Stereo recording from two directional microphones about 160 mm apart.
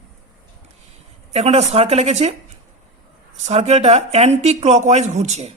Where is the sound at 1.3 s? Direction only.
40° right (ahead or behind).